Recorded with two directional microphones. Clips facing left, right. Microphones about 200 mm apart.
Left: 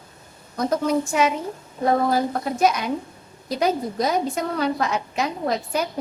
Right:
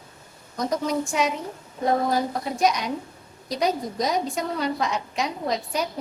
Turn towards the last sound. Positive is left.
turn(degrees=5)  # may be behind; listen again after turning